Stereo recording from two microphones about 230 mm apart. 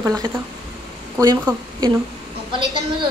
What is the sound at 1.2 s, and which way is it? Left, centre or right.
Speech, centre.